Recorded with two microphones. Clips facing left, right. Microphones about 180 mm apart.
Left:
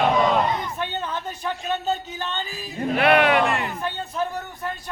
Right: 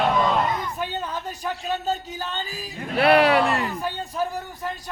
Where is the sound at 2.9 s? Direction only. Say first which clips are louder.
Right 1 dB; 35° right (ahead or behind).